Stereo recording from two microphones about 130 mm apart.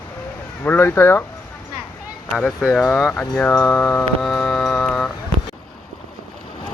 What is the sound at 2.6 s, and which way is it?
Speech, 5° right (ahead or behind).